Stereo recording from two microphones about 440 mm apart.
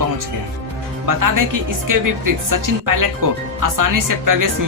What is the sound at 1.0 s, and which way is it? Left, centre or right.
Speech, right.